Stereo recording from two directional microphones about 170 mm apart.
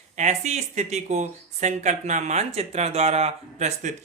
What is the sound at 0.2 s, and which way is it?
Speech, 45° right (ahead or behind).